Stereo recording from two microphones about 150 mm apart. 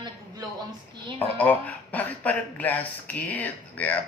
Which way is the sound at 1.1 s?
10° left (ahead or behind).